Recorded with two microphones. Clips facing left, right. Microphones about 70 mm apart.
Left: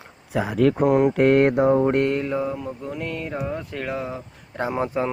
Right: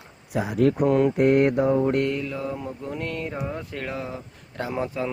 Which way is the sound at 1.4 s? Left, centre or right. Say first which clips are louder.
Left 3 dB; left.